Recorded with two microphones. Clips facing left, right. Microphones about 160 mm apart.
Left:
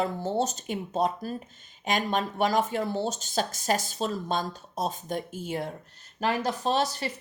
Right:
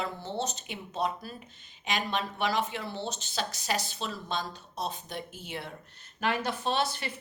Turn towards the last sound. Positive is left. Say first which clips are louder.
# left 4 dB
turn(degrees=40)  # may be behind; listen again after turning